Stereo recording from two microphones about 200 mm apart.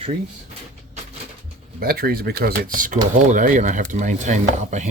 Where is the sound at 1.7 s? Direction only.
50° right (ahead or behind).